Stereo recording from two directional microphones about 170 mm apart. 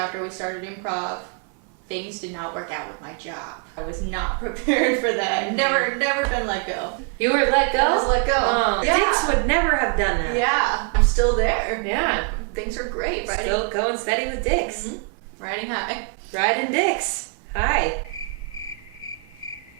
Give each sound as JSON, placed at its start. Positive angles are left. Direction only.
{"t": 0.0, "sound": "a woman's voice", "side_deg": -15}
{"t": 2.3, "sound": "a woman's voice", "side_deg": -15}
{"t": 18.1, "sound": "cricket", "side_deg": 20}